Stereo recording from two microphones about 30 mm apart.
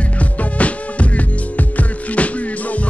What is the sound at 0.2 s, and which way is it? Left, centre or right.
Music, left.